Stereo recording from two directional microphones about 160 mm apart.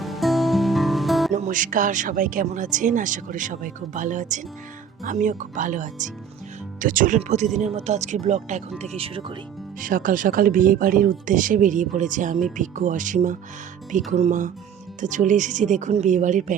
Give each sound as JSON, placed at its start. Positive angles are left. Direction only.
{"t": 0.0, "sound": "music", "side_deg": 0}
{"t": 1.3, "sound": "speech", "side_deg": -50}
{"t": 9.8, "sound": "speech", "side_deg": -55}